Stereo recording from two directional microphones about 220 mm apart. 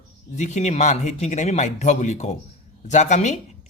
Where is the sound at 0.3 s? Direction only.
30° left (ahead or behind).